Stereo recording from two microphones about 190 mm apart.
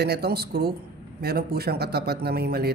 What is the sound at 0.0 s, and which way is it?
A man's voice, 60° right (ahead or behind).